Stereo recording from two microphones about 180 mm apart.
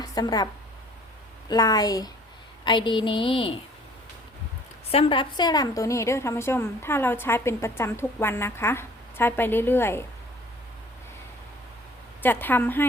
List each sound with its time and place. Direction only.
0.0 s a woman's voice: 20° left (ahead or behind)
1.5 s a woman's voice: 20° left (ahead or behind)
4.9 s a woman's voice: 30° left (ahead or behind); by 10.0 s 10° left (ahead or behind)
12.2 s a woman's voice: 10° left (ahead or behind)